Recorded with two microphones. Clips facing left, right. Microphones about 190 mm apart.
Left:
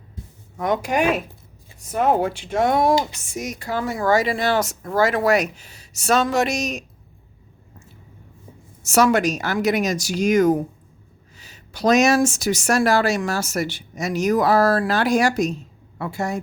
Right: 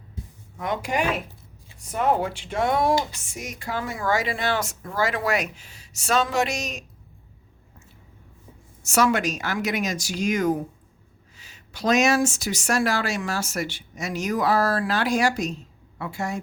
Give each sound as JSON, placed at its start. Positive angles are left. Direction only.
{"t": 0.6, "sound": "speech", "side_deg": 45}
{"t": 2.0, "sound": "a woman's voice", "side_deg": 45}
{"t": 8.8, "sound": "a woman's voice", "side_deg": 40}